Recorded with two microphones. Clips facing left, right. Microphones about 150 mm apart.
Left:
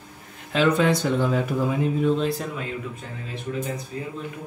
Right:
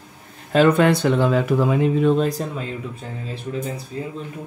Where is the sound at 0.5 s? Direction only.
50° right (ahead or behind); by 2.1 s 85° right.